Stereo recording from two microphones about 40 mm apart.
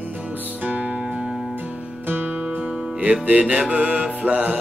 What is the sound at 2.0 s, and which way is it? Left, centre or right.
Music, right.